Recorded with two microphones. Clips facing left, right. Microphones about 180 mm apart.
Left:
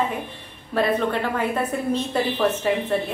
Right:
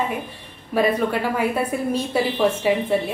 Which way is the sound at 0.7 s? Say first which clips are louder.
Right 2 dB; 10° right (ahead or behind).